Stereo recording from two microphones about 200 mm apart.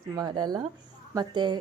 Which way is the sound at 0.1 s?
20° right (ahead or behind).